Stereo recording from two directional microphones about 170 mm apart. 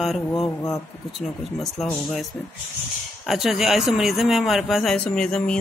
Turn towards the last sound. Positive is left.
turn(degrees=5)  # may be behind; listen again after turning